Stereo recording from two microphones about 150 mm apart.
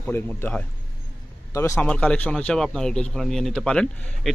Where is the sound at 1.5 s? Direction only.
20° left (ahead or behind).